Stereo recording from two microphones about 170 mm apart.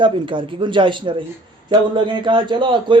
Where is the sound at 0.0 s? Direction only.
30° right (ahead or behind).